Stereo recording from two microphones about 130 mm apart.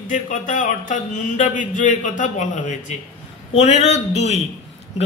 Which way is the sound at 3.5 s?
55° left (ahead or behind).